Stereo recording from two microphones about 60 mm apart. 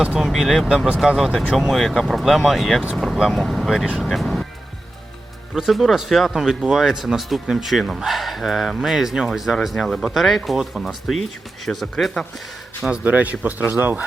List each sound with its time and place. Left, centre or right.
0.2 s speech: centre
5.5 s speech: centre
12.9 s speech: right